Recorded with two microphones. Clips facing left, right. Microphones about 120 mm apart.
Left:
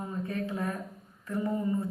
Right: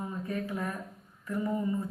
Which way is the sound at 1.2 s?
30° left (ahead or behind).